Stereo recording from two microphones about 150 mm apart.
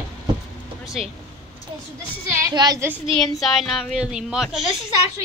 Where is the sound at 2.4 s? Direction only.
25° right (ahead or behind).